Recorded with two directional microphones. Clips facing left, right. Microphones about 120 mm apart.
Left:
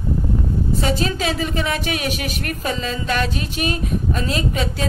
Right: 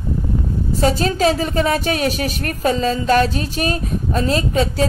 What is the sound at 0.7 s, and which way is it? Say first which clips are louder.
A woman's voice: right 7 dB; 40° right (ahead or behind).